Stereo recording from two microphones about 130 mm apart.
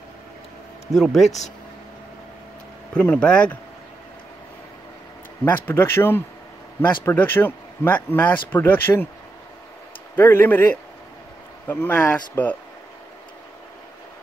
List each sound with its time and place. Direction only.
0.9 s speech: centre (ahead or behind)
2.9 s speech: 10° left (ahead or behind)
5.4 s speech: 15° left (ahead or behind)
10.1 s speech: 15° left (ahead or behind)